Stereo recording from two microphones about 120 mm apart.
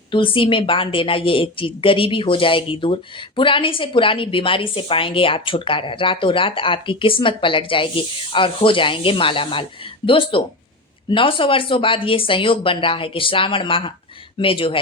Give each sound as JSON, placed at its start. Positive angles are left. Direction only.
{"t": 0.1, "sound": "speech", "side_deg": 45}